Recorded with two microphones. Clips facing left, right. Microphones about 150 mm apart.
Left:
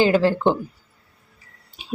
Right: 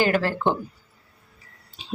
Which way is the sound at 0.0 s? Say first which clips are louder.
Left 5 dB; 20° left (ahead or behind).